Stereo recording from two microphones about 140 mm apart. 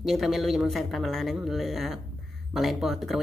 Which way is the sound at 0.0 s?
Centre (ahead or behind).